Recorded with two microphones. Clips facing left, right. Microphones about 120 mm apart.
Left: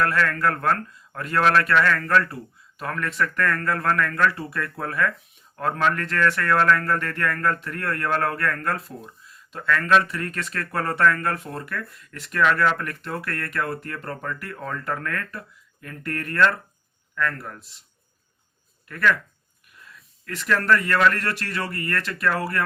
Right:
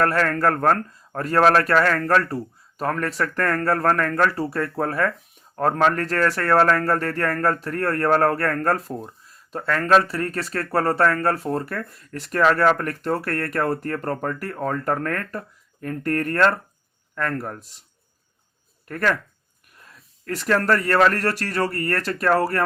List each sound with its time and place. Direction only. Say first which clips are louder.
0.0 s speech: right 3 dB; 40° right (ahead or behind)
18.9 s speech: even; 40° right (ahead or behind)